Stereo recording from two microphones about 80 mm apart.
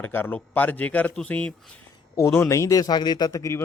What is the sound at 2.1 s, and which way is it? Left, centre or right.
A man's voice, left.